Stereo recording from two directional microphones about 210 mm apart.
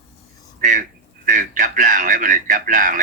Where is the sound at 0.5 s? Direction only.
40° right (ahead or behind).